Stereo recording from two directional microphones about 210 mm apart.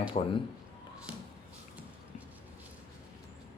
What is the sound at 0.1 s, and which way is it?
Speech, 30° left (ahead or behind).